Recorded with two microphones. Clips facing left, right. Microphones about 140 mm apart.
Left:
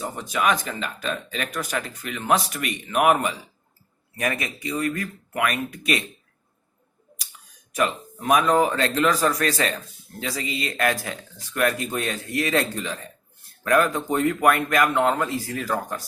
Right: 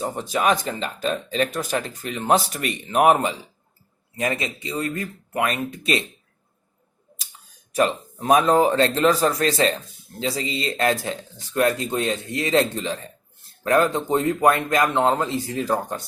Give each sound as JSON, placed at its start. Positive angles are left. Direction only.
{"t": 0.0, "sound": "a man's voice", "side_deg": -30}
{"t": 7.7, "sound": "a man's voice", "side_deg": -30}